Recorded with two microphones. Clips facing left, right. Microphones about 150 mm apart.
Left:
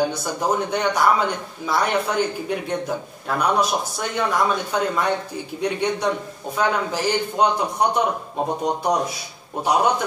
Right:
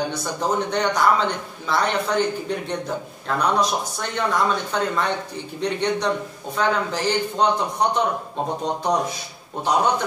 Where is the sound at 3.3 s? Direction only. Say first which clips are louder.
Left 1 dB; 10° left (ahead or behind).